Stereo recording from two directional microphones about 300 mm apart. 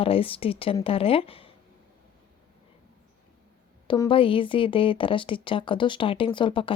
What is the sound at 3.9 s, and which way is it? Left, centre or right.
Speech, centre.